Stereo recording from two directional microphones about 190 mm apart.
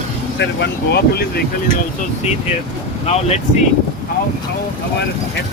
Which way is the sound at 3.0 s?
35° left (ahead or behind).